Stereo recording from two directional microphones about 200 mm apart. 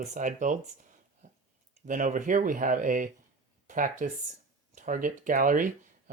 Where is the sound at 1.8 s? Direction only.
40° right (ahead or behind).